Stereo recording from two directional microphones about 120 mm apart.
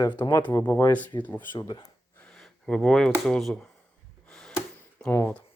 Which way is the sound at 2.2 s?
5° left (ahead or behind).